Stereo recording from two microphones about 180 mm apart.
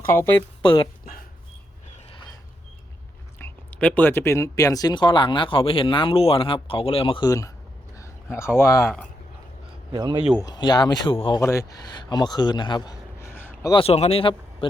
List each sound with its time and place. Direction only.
0.0 s speech: 15° left (ahead or behind)
0.6 s speech: 30° left (ahead or behind)
3.3 s speech: 10° left (ahead or behind)
9.9 s speech: 25° right (ahead or behind)
10.3 s speech: 20° left (ahead or behind)
11.3 s a man's voice: 15° left (ahead or behind)
13.8 s speech: 35° left (ahead or behind)